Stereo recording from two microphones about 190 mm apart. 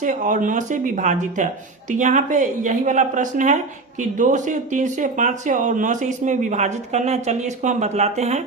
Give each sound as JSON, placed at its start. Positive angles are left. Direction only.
{"t": 0.0, "sound": "a woman's voice", "side_deg": -45}